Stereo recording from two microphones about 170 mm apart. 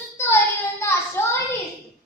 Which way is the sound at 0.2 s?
10° left (ahead or behind).